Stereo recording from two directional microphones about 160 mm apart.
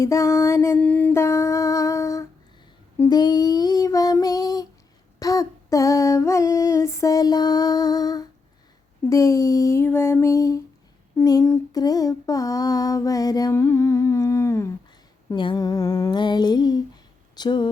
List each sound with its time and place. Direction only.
0.0 s a sound: 20° left (ahead or behind)
0.8 s humming: 10° left (ahead or behind)
3.0 s child singing: 25° left (ahead or behind)
5.2 s female singing: 20° left (ahead or behind)
9.0 s a sound: 20° left (ahead or behind)
17.3 s speech: 25° left (ahead or behind)